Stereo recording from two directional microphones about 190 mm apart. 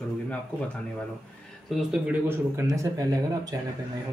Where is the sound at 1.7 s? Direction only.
Centre (ahead or behind).